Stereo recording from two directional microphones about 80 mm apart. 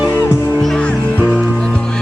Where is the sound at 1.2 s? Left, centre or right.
Centre.